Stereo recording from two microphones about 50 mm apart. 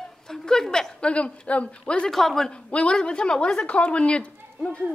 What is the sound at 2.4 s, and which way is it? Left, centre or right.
Speech, centre.